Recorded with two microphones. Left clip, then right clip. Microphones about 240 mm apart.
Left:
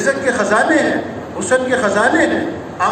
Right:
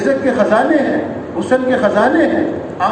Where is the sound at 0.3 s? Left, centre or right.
Left.